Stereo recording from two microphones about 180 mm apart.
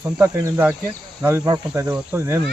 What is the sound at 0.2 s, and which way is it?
Speech, 15° right (ahead or behind).